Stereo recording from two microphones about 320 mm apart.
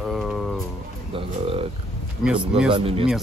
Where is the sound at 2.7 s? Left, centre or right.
Centre.